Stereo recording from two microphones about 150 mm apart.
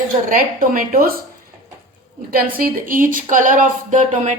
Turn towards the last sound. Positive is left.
turn(degrees=-55)  # may be behind; listen again after turning